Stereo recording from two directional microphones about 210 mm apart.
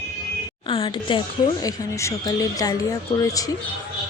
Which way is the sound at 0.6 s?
25° left (ahead or behind).